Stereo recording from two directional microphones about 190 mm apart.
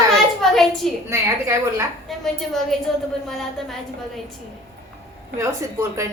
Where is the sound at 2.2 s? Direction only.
Centre (ahead or behind).